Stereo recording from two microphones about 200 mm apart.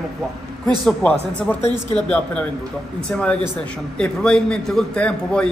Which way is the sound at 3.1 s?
5° left (ahead or behind).